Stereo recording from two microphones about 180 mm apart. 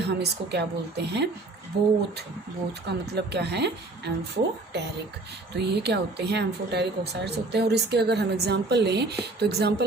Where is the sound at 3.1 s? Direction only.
65° right (ahead or behind).